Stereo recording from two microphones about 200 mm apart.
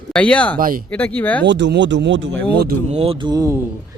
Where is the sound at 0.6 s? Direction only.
45° right (ahead or behind).